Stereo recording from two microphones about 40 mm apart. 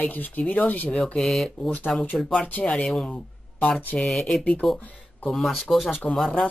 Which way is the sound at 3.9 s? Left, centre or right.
Left.